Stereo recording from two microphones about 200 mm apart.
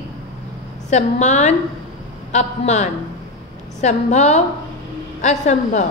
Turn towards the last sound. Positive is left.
turn(degrees=35)  # may be behind; listen again after turning